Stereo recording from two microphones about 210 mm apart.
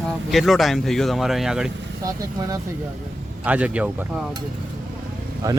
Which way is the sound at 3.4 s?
5° right (ahead or behind).